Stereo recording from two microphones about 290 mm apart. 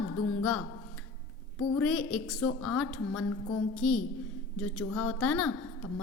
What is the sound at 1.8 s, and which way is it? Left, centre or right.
A woman's voice, centre.